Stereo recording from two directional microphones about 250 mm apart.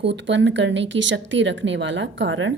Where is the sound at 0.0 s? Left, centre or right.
Right.